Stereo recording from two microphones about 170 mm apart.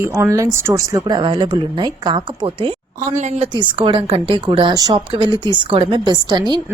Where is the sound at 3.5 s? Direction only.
30° right (ahead or behind).